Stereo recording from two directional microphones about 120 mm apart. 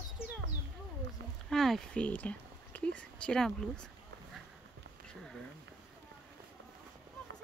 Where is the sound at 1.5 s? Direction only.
5° left (ahead or behind).